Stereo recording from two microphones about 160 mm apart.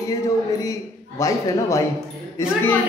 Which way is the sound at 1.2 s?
20° left (ahead or behind).